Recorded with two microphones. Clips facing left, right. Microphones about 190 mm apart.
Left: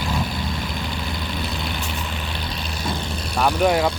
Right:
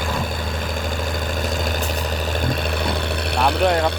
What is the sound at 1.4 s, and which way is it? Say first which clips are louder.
Vehicle: right 5 dB; 45° right (ahead or behind).